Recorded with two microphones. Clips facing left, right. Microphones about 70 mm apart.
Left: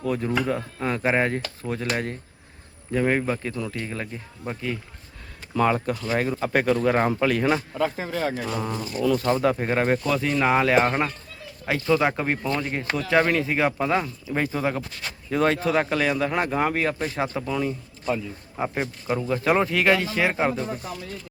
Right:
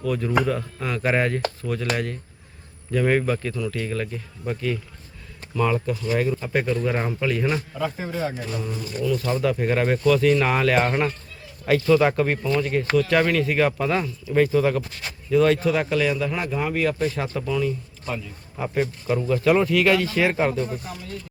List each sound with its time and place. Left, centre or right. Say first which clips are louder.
0.0 s speech: right 2 dB; left
2.9 s speech: right 2 dB; centre
5.5 s speech: left 1 dB; left
8.5 s speech: left 2 dB; left
9.1 s speech: even; left
9.6 s speech: right 3 dB; left
15.3 s speech: right 3 dB; left
17.0 s speech: right 1 dB; left